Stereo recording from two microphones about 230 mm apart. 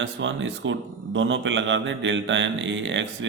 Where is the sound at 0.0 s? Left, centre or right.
Right.